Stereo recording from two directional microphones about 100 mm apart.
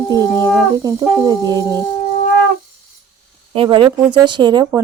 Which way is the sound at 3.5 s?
65° right (ahead or behind).